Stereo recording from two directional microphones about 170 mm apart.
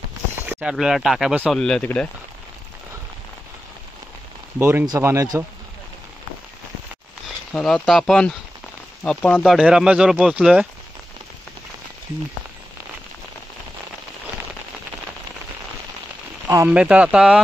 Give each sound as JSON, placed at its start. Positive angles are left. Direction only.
{"t": 0.5, "sound": "speech", "side_deg": -5}
{"t": 4.6, "sound": "speech", "side_deg": -15}
{"t": 7.5, "sound": "speech", "side_deg": 0}
{"t": 16.4, "sound": "speech", "side_deg": -20}
{"t": 16.7, "sound": "speech", "side_deg": -5}